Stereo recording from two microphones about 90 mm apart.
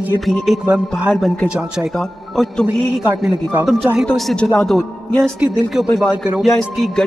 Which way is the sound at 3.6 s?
5° right (ahead or behind).